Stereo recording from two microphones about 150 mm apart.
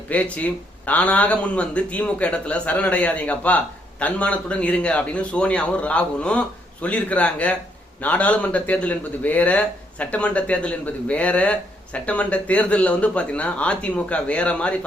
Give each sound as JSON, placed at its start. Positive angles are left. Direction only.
{"t": 0.1, "sound": "speech", "side_deg": 10}